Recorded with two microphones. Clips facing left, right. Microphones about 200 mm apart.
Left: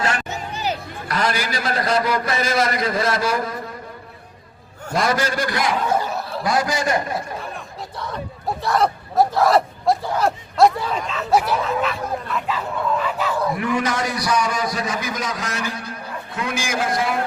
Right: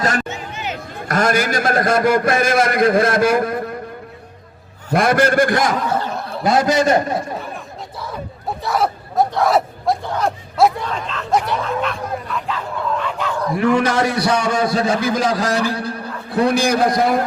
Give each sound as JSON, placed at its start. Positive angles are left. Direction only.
{"t": 0.3, "sound": "a sound", "side_deg": 35}
{"t": 1.0, "sound": "a man's voice", "side_deg": -45}
{"t": 4.9, "sound": "a man's voice", "side_deg": -55}
{"t": 5.9, "sound": "snicker", "side_deg": 10}
{"t": 6.4, "sound": "a man's voice", "side_deg": -25}
{"t": 7.3, "sound": "crowd", "side_deg": 0}
{"t": 8.6, "sound": "speech", "side_deg": 0}
{"t": 13.6, "sound": "a man's voice", "side_deg": -30}